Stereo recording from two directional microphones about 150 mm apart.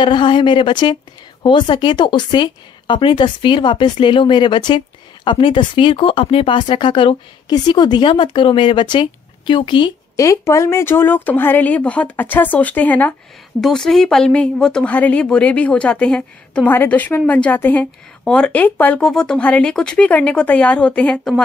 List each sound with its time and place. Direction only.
0.0 s a woman's voice: 35° left (ahead or behind)
10.1 s a woman's voice: 20° left (ahead or behind); by 21.4 s 5° left (ahead or behind)